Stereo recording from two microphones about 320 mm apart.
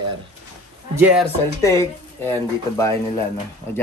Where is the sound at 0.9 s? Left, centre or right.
Centre.